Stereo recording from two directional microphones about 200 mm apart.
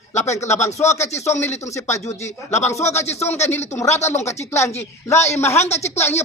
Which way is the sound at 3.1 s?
35° left (ahead or behind).